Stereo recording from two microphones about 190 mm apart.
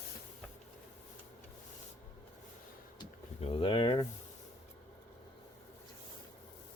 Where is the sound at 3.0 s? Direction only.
25° left (ahead or behind).